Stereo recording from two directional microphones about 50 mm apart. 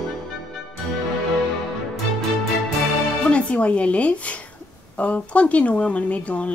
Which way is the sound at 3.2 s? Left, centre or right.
Left.